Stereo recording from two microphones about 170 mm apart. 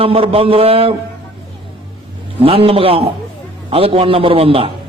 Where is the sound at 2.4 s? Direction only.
35° right (ahead or behind).